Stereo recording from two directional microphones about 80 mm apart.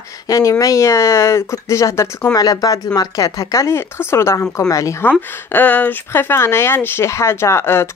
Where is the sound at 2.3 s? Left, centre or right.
Left.